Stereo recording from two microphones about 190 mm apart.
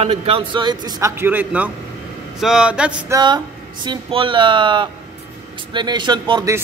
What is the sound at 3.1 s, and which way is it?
A man's voice, 20° right (ahead or behind).